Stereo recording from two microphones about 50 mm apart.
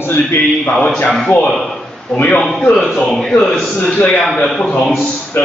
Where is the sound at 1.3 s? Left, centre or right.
Left.